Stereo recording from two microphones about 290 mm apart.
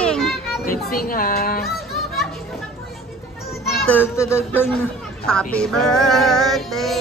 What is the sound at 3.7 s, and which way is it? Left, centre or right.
Speech, centre.